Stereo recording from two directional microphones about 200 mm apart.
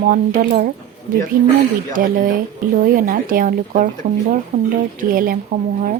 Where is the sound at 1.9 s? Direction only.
45° right (ahead or behind).